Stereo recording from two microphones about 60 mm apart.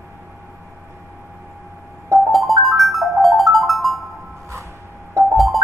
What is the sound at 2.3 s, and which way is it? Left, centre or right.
Music, centre.